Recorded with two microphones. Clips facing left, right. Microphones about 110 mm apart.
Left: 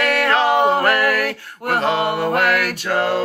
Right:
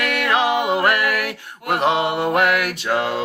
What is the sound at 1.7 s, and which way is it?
Speech, 15° right (ahead or behind).